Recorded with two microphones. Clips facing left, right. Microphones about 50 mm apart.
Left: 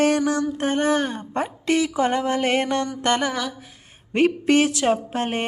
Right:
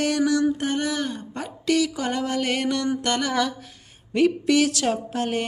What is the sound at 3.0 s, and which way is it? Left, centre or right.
Mantra, left.